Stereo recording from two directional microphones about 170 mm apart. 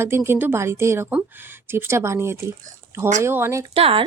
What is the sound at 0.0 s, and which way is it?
Speech, 15° right (ahead or behind).